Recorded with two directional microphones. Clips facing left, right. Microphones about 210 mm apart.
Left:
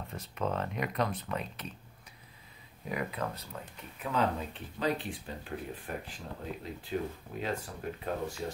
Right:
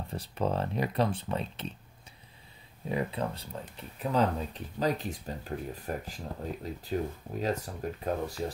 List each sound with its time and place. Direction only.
0.1 s speech: 35° right (ahead or behind)
2.9 s speech: 30° right (ahead or behind)